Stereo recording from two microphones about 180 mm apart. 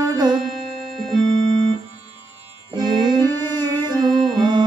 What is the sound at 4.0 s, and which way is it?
Music, centre (ahead or behind).